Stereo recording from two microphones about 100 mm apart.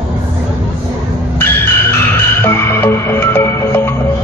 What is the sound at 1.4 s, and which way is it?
Music, 20° left (ahead or behind).